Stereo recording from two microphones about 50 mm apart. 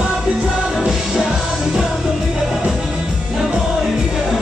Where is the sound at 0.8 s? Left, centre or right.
Centre.